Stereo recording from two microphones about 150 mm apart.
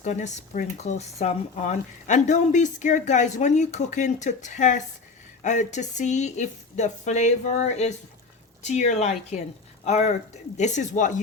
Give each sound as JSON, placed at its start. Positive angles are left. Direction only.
{"t": 0.0, "sound": "speech", "side_deg": 50}